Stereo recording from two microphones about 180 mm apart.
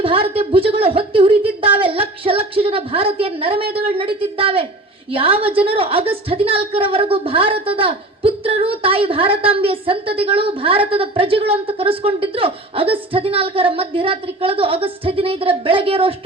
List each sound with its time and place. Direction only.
0.0 s a woman's voice: 30° right (ahead or behind)